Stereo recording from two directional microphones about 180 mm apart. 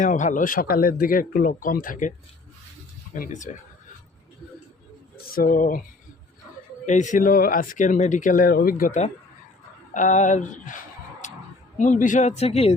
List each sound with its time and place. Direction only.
0.0 s speech: 45° left (ahead or behind)
5.1 s speech: 50° left (ahead or behind)
6.8 s speech: 45° left (ahead or behind)
11.8 s speech: 45° left (ahead or behind)